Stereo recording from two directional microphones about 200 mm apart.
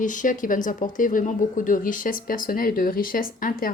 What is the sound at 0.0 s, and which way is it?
Speech, 40° left (ahead or behind).